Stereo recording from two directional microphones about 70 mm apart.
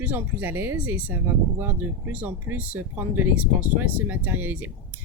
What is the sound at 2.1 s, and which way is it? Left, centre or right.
Speech, right.